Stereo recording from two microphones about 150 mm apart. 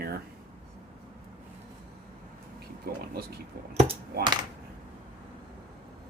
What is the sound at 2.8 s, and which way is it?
Speech, 90° right.